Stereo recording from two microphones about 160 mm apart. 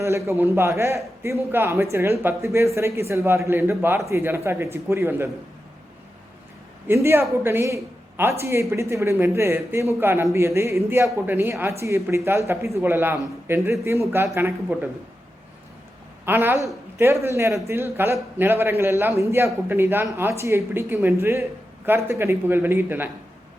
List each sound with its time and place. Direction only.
0.0 s a man's voice: 15° right (ahead or behind)
6.8 s a man's voice: 15° right (ahead or behind)
16.2 s a man's voice: 15° right (ahead or behind)